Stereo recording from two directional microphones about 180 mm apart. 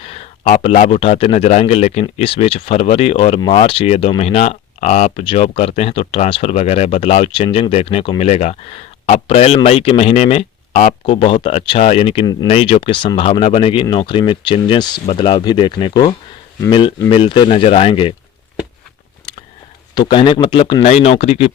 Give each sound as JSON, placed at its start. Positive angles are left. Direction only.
{"t": 0.0, "sound": "speech", "side_deg": 35}
{"t": 12.5, "sound": "speech", "side_deg": 35}
{"t": 20.0, "sound": "speech", "side_deg": 25}